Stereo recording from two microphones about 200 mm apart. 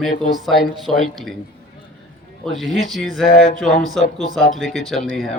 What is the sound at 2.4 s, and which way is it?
Speech, centre (ahead or behind).